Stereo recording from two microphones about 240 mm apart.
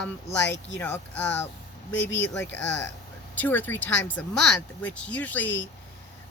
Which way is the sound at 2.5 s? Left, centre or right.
Left.